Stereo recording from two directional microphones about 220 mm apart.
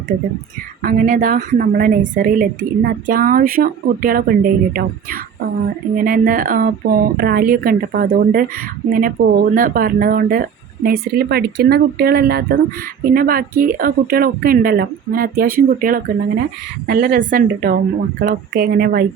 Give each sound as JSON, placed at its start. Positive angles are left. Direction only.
{"t": 0.8, "sound": "a woman's voice", "side_deg": -40}